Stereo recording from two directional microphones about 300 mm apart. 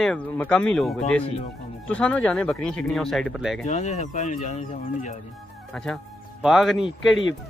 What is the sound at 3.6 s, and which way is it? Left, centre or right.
Speech, left.